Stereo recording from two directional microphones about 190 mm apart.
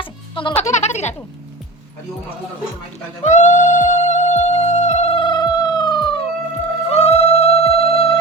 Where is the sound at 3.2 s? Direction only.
40° left (ahead or behind).